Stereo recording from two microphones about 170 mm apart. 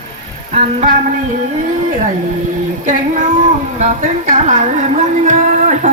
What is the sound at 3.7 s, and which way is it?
A woman's voice, 45° right (ahead or behind).